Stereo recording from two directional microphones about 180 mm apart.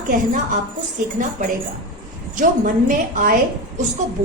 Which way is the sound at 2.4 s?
45° right (ahead or behind).